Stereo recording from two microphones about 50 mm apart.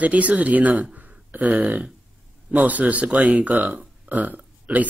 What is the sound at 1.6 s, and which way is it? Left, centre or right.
Speech, right.